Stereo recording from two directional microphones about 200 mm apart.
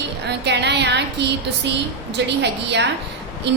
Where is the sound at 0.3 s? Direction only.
60° right (ahead or behind).